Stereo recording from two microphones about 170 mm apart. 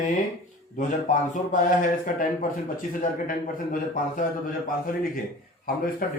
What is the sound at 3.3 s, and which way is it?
A man's voice, 55° left (ahead or behind).